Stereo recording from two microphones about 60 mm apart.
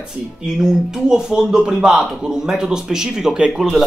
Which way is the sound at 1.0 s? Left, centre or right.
Centre.